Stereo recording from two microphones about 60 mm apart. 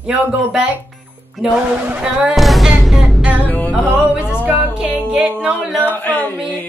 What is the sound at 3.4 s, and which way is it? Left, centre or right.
Music, left.